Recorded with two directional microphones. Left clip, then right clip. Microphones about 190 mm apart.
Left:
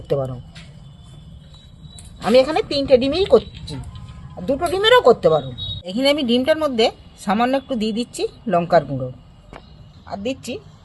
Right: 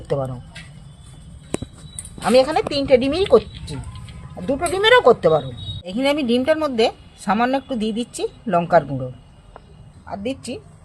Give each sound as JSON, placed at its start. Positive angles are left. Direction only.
{"t": 0.1, "sound": "speech", "side_deg": 20}
{"t": 2.2, "sound": "speech", "side_deg": 15}
{"t": 4.4, "sound": "speech", "side_deg": 10}
{"t": 10.1, "sound": "speech", "side_deg": 10}